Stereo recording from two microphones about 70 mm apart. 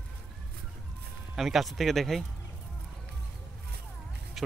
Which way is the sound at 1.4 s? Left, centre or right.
Centre.